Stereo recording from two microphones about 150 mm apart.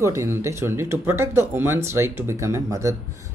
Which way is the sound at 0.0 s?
20° right (ahead or behind).